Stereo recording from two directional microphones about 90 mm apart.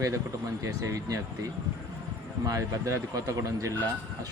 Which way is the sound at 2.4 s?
40° right (ahead or behind).